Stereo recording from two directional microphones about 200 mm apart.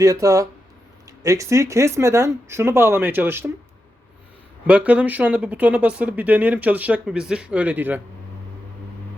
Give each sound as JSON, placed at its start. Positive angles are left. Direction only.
{"t": 0.0, "sound": "speech", "side_deg": -15}
{"t": 4.6, "sound": "speech", "side_deg": -5}